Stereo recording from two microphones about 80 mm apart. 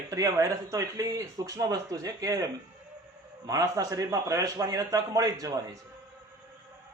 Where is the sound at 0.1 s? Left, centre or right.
Right.